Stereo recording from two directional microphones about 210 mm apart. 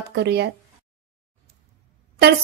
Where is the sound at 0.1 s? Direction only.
50° right (ahead or behind).